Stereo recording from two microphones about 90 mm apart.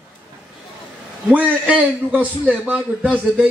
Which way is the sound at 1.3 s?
15° right (ahead or behind).